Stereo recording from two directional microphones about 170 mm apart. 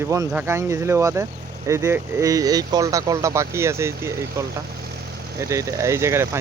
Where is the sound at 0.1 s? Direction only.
15° right (ahead or behind).